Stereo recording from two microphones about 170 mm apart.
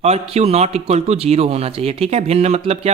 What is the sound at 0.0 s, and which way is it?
Speech, 40° right (ahead or behind).